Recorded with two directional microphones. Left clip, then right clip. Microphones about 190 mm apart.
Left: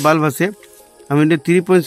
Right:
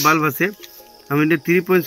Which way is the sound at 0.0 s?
60° left (ahead or behind).